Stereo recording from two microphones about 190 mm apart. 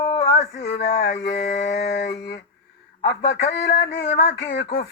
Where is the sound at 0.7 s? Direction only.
60° left (ahead or behind).